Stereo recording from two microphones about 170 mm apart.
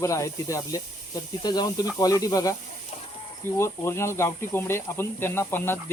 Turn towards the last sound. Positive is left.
turn(degrees=15)  # may be behind; listen again after turning